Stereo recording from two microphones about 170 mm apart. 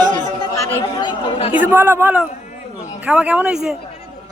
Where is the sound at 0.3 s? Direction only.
15° left (ahead or behind); by 1.5 s 30° left (ahead or behind).